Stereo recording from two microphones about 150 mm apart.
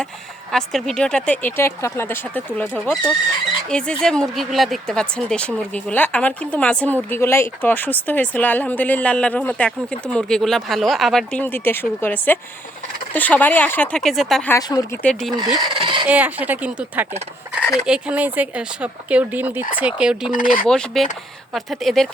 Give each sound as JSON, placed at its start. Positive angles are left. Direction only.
{"t": 0.5, "sound": "speech", "side_deg": 0}
{"t": 14.7, "sound": "speech", "side_deg": 20}
{"t": 15.0, "sound": "speech", "side_deg": 0}
{"t": 15.4, "sound": "speech", "side_deg": -25}
{"t": 16.0, "sound": "speech", "side_deg": -10}
{"t": 20.3, "sound": "speech", "side_deg": 65}
{"t": 20.7, "sound": "speech", "side_deg": 5}